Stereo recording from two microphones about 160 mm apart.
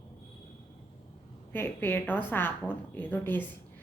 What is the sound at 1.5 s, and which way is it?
A woman's voice, 10° left (ahead or behind).